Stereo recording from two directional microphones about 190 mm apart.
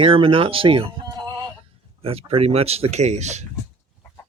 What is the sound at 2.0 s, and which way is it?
Speech, 30° right (ahead or behind).